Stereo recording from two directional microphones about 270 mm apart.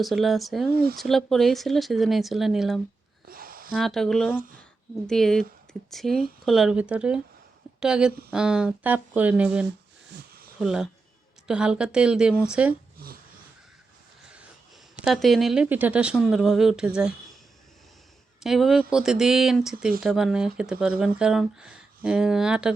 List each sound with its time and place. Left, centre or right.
0.0 s speech: centre
0.7 s speech: right
0.9 s speech: centre
3.2 s a sound: right
3.8 s speech: centre
4.4 s speech: right
5.0 s a woman's voice: centre
14.9 s speech: centre
18.3 s speech: centre